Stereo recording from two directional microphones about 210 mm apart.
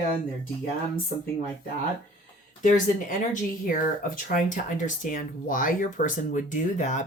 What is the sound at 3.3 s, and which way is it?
Speech, 40° left (ahead or behind).